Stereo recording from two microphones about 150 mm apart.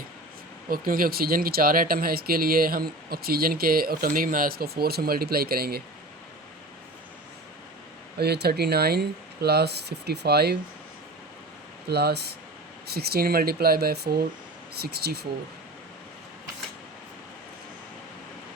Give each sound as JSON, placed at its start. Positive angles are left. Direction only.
{"t": 0.7, "sound": "speech", "side_deg": -75}
{"t": 8.2, "sound": "speech", "side_deg": -90}
{"t": 11.9, "sound": "speech", "side_deg": -90}